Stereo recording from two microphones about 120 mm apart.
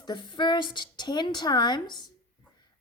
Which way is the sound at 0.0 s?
40° left (ahead or behind).